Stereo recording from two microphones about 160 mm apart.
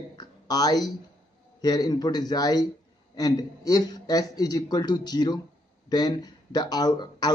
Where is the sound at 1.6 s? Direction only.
25° left (ahead or behind).